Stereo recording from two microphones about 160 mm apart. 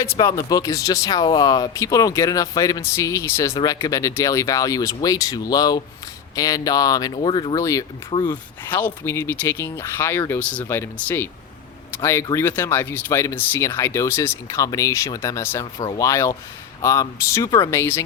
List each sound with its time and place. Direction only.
0.2 s speech: 25° left (ahead or behind)